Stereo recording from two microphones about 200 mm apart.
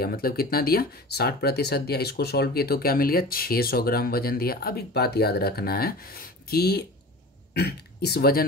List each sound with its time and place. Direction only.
0.0 s speech: 50° left (ahead or behind)